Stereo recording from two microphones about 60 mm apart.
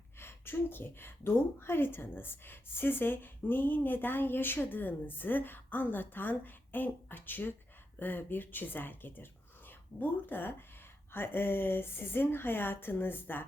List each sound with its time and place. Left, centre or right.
0.2 s a woman's voice: left